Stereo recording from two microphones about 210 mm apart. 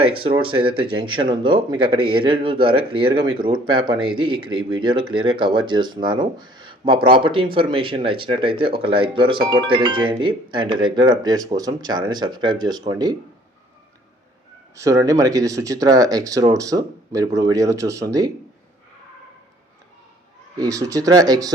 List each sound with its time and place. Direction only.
0.2 s speech: 25° right (ahead or behind)
14.8 s speech: 15° right (ahead or behind)
20.6 s speech: 15° right (ahead or behind)